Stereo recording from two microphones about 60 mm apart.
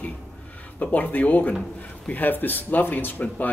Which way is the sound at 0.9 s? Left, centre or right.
Left.